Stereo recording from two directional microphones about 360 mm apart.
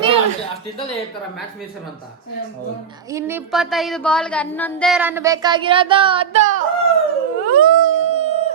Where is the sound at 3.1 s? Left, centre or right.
Centre.